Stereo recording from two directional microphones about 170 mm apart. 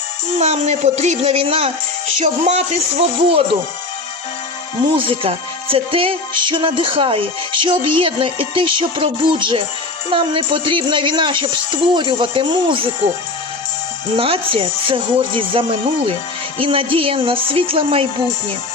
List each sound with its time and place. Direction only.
0.3 s music: 40° right (ahead or behind)
4.9 s music: 30° right (ahead or behind)
10.1 s a woman's voice: 30° right (ahead or behind)
14.2 s music: 30° right (ahead or behind)